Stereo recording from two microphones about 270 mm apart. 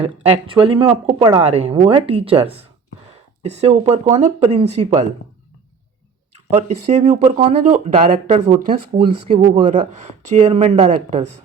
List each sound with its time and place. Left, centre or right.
0.0 s speech: right
6.5 s speech: right